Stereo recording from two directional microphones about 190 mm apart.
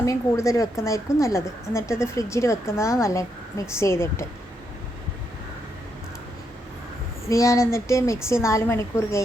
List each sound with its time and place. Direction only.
0.0 s a woman's voice: 15° left (ahead or behind)
7.3 s a woman's voice: 15° left (ahead or behind)